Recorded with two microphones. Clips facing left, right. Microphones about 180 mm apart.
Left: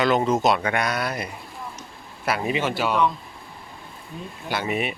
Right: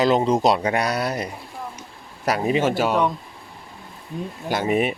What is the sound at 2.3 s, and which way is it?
Speech, 40° right (ahead or behind).